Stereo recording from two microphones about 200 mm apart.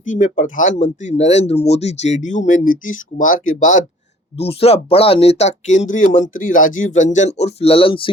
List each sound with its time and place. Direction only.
0.0 s speech: 40° left (ahead or behind)